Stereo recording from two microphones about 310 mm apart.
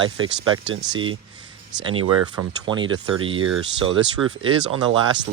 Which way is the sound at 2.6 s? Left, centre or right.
Centre.